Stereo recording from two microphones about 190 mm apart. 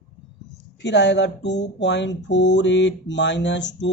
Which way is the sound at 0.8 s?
65° left (ahead or behind).